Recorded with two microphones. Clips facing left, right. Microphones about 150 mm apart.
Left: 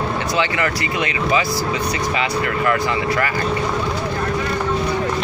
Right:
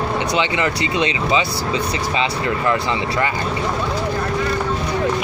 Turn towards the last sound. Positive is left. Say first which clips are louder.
# left 1 dB
turn(degrees=-25)  # may be behind; listen again after turning